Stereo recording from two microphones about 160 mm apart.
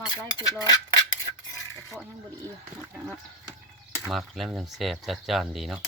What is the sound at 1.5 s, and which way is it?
Stir, 15° left (ahead or behind).